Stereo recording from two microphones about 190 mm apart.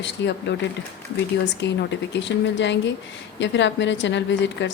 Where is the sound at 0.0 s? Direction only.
65° left (ahead or behind).